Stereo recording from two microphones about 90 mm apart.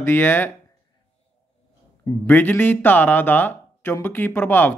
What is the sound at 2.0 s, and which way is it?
Speech, 25° left (ahead or behind).